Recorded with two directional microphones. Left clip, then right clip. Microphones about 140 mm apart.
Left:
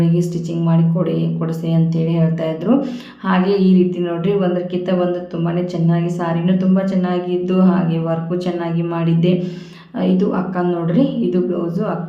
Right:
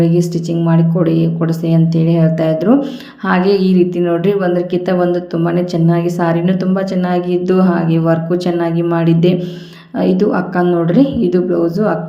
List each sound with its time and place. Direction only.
0.0 s a woman's voice: 35° right (ahead or behind)